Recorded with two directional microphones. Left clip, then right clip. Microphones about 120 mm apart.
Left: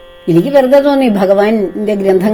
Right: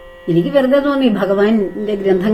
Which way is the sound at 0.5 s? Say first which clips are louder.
Left 6 dB; 60° left (ahead or behind).